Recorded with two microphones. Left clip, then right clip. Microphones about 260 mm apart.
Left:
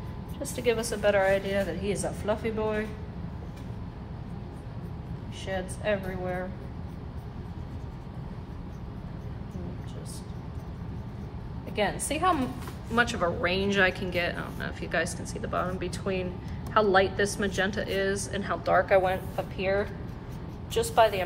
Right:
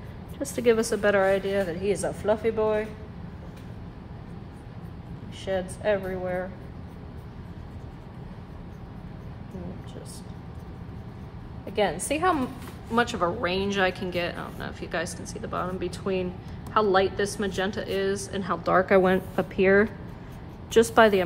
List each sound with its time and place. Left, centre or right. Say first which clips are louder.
0.6 s a woman's voice: right 5 dB; right
5.4 s speech: right 4 dB; right
11.7 s a woman's voice: right 3 dB; right
12.9 s a woman's voice: right 1 dB; centre